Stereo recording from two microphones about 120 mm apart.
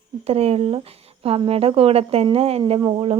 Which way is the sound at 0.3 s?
55° right (ahead or behind).